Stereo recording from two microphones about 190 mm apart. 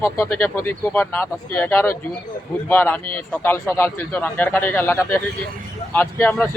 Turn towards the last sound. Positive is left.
turn(degrees=10)  # may be behind; listen again after turning